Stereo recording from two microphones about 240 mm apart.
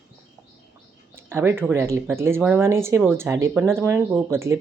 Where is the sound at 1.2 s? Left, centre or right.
Centre.